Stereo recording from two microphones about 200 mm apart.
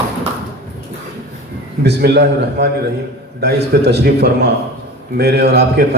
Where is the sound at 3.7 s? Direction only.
55° right (ahead or behind).